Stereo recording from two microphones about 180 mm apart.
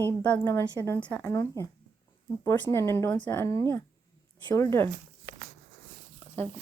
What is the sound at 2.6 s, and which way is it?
Speech, 15° left (ahead or behind).